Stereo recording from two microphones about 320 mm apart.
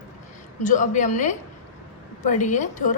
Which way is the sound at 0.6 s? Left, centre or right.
Left.